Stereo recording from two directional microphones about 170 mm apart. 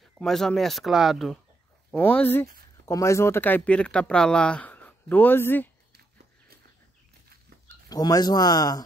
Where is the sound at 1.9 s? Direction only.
10° left (ahead or behind).